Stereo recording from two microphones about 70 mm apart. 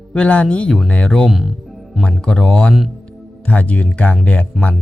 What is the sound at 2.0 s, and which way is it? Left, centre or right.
Speech, centre.